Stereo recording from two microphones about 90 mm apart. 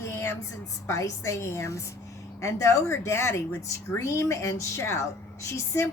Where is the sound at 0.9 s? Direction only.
35° left (ahead or behind).